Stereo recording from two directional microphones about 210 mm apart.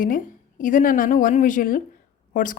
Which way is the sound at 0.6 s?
40° left (ahead or behind).